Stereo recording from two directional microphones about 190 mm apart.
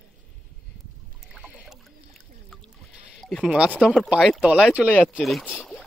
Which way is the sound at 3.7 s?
Centre (ahead or behind).